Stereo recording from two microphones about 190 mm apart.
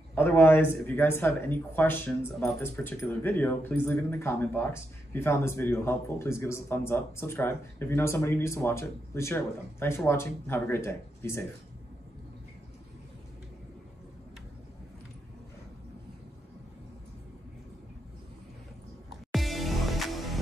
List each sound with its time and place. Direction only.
0.1 s speech: 10° left (ahead or behind)
19.3 s music: centre (ahead or behind)